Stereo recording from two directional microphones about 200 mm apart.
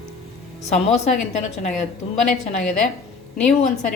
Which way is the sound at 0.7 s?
35° left (ahead or behind).